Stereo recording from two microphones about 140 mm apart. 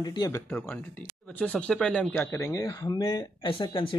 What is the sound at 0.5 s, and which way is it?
Speech, 5° left (ahead or behind).